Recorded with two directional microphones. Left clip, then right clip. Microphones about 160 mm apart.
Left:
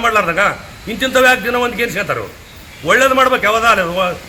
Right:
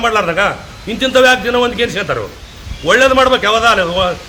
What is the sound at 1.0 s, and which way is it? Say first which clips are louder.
Speech: right 2 dB; centre (ahead or behind).